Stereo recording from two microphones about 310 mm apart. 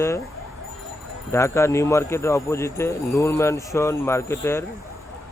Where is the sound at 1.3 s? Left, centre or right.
Centre.